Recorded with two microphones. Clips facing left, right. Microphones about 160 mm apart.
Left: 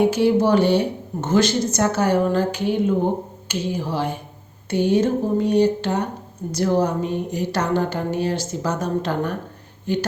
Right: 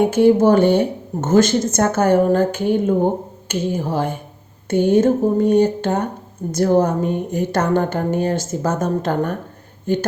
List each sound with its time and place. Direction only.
0.0 s speech: 50° right (ahead or behind)